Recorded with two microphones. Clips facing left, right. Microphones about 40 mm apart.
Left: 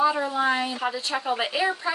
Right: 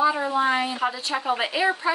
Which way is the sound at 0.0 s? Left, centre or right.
Centre.